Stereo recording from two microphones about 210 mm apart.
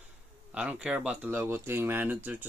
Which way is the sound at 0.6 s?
5° right (ahead or behind).